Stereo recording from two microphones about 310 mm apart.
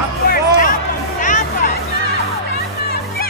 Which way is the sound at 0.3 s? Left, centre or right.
Left.